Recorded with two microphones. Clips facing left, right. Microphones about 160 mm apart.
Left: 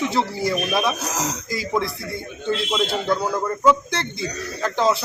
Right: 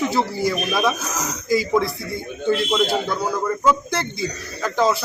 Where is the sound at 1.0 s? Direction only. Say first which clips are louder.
Left 1 dB; 35° left (ahead or behind).